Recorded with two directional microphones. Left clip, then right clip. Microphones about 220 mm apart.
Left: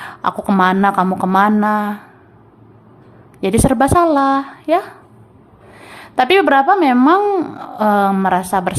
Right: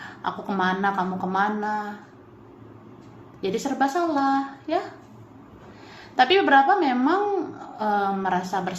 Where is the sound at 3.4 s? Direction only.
35° left (ahead or behind).